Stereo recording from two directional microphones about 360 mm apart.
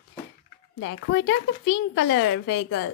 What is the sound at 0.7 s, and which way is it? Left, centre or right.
A woman's voice, left.